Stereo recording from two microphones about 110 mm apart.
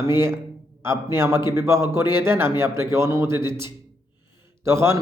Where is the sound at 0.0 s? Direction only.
25° right (ahead or behind).